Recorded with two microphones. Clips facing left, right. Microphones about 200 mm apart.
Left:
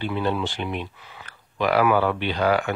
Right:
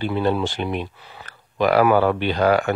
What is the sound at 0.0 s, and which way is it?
Speech, 40° right (ahead or behind).